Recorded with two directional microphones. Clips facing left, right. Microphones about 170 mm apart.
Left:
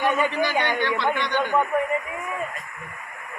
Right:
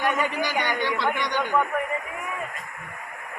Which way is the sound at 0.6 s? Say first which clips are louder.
Left 2 dB; 10° right (ahead or behind).